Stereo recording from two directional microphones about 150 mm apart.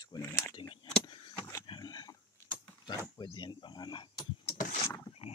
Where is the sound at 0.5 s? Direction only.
30° left (ahead or behind).